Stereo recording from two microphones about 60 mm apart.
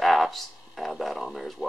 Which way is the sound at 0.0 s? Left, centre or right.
Centre.